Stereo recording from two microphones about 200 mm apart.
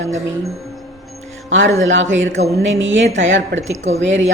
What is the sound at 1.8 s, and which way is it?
A woman's voice, 70° right (ahead or behind).